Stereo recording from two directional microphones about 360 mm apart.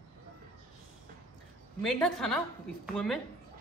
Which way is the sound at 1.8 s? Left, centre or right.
Centre.